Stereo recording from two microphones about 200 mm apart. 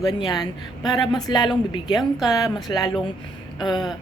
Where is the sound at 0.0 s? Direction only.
20° left (ahead or behind).